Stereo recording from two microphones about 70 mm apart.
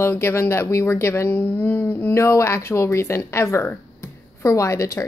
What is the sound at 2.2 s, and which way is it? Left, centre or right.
A woman's voice, left.